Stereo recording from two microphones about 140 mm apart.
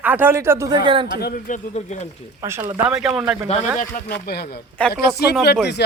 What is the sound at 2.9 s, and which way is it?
Speech, centre (ahead or behind).